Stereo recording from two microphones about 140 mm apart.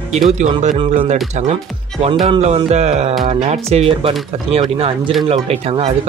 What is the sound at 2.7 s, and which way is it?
Speech, 50° right (ahead or behind).